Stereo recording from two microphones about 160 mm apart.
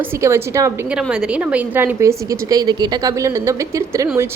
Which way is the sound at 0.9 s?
5° right (ahead or behind).